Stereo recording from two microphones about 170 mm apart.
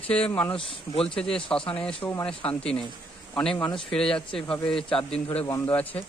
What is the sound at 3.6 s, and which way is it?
Speech, 30° left (ahead or behind).